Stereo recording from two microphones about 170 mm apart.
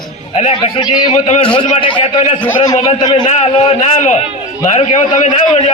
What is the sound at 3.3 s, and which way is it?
A man's voice, 40° left (ahead or behind).